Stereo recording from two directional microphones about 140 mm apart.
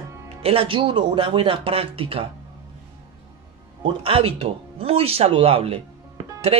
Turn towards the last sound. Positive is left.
turn(degrees=-45)  # may be behind; listen again after turning